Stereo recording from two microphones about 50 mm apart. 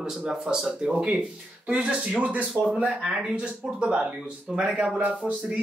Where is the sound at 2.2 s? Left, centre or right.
Right.